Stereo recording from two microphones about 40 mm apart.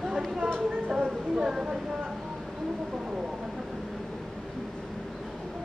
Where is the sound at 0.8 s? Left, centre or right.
Right.